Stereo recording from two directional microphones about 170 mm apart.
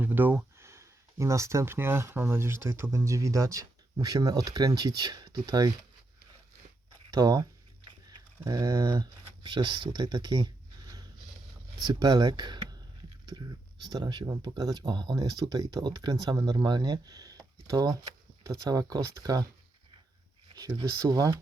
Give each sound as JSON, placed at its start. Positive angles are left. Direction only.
{"t": 0.0, "sound": "speech", "side_deg": -10}
{"t": 7.1, "sound": "speech", "side_deg": -25}
{"t": 8.4, "sound": "speech", "side_deg": -20}
{"t": 20.6, "sound": "speech", "side_deg": -25}